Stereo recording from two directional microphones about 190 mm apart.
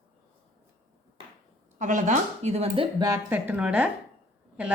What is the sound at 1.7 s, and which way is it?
Speech, 40° right (ahead or behind).